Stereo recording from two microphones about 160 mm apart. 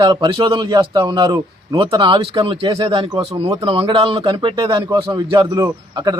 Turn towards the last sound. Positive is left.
turn(degrees=-25)  # may be behind; listen again after turning